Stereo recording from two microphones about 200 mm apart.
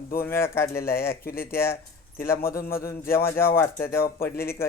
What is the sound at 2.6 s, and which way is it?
Speech, 45° left (ahead or behind).